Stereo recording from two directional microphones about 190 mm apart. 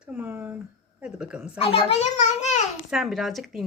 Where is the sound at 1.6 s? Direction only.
30° left (ahead or behind).